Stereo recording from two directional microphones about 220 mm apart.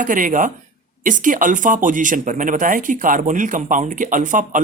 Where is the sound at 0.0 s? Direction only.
35° right (ahead or behind).